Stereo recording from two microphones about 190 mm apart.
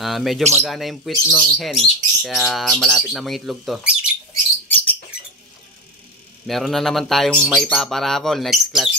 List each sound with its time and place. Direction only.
0.0 s speech: centre (ahead or behind)
6.4 s speech: centre (ahead or behind)